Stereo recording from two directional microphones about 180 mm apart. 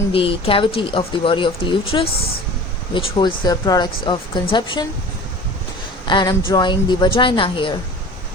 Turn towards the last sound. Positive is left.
turn(degrees=30)  # may be behind; listen again after turning